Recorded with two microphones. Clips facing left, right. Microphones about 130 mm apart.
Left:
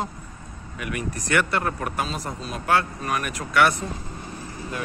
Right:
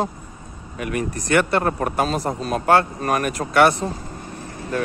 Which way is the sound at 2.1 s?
55° right (ahead or behind).